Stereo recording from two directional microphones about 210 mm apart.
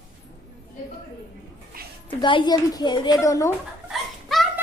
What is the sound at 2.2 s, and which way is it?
A woman's voice, 20° left (ahead or behind).